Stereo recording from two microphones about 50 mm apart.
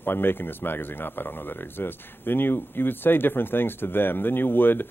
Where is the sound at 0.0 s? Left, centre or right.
Left.